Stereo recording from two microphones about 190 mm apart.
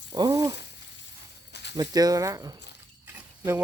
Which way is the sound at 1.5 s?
65° left (ahead or behind).